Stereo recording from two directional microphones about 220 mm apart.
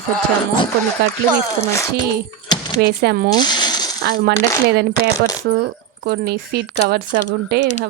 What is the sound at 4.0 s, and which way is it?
Speech, 45° right (ahead or behind).